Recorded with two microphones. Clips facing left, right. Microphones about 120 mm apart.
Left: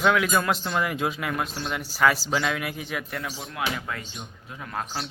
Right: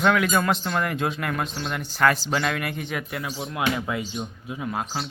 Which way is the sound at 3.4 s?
20° right (ahead or behind).